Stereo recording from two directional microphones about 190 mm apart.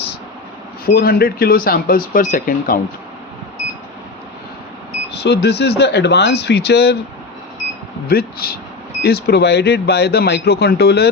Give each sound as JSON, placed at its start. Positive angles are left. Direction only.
{"t": 0.9, "sound": "speech", "side_deg": 55}
{"t": 5.2, "sound": "speech", "side_deg": 60}
{"t": 8.0, "sound": "speech", "side_deg": 55}